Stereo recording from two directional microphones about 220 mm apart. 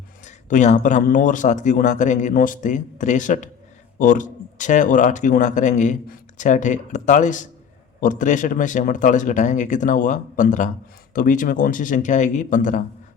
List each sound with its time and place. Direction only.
0.3 s speech: 35° left (ahead or behind)